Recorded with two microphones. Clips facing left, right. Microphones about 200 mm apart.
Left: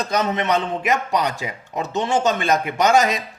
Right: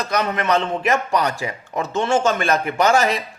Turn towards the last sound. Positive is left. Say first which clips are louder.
# even
turn(degrees=15)  # may be behind; listen again after turning